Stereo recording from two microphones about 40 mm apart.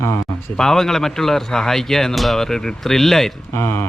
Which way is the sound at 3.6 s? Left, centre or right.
Left.